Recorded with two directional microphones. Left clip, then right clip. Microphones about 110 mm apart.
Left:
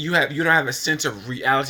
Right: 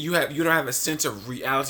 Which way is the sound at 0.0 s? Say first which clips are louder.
Left 3 dB; 40° right (ahead or behind).